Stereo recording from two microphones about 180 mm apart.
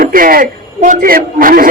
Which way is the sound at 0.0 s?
50° right (ahead or behind).